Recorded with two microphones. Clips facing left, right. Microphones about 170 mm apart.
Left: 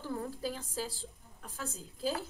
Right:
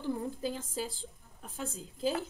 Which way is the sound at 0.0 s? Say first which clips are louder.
Right 3 dB; 20° right (ahead or behind).